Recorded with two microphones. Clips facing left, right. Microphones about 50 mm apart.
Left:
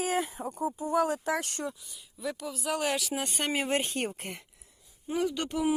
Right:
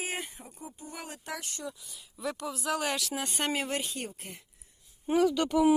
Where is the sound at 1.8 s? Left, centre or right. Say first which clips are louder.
Even; centre.